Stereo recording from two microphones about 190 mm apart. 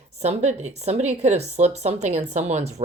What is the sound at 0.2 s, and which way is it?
Speech, 35° right (ahead or behind).